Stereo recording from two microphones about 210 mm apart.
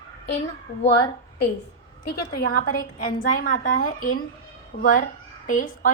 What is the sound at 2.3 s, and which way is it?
A woman's voice, 45° left (ahead or behind).